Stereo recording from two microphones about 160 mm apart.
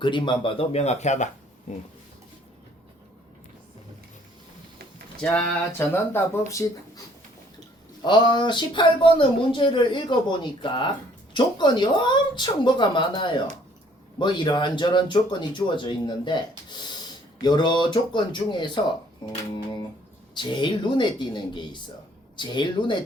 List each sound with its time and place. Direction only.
0.0 s speech: 30° left (ahead or behind); by 1.3 s 45° left (ahead or behind)
5.2 s a sound: 5° left (ahead or behind)
6.5 s speech: 20° left (ahead or behind)
8.0 s speech: 30° left (ahead or behind)
20.3 s speech: 30° left (ahead or behind)